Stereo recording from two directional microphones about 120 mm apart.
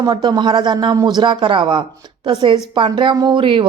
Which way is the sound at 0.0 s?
35° right (ahead or behind).